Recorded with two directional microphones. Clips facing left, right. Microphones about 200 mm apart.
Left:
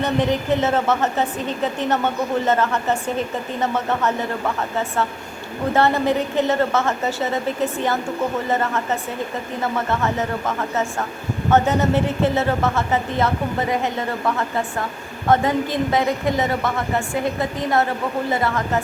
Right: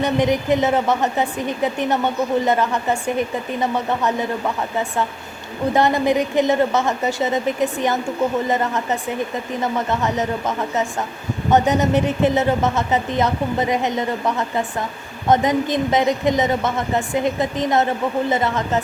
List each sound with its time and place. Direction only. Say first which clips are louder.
0.0 s a woman's voice: right 2 dB; 15° right (ahead or behind)